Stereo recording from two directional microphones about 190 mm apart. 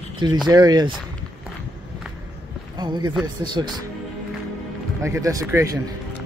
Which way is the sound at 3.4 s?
20° right (ahead or behind).